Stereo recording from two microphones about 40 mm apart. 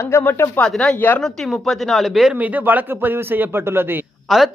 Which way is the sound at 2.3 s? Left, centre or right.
Right.